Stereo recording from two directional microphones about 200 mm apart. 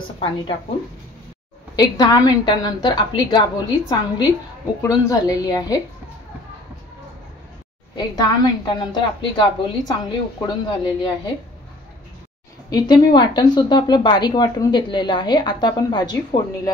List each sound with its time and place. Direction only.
1.8 s a woman's voice: 20° left (ahead or behind)
7.9 s a woman's voice: 20° left (ahead or behind)
12.6 s a woman's voice: 20° left (ahead or behind)